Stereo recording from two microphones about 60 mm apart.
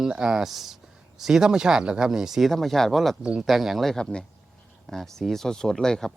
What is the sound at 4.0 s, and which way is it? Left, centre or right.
Speech, centre.